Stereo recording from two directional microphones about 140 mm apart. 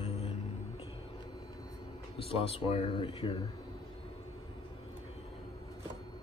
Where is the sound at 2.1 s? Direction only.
40° left (ahead or behind).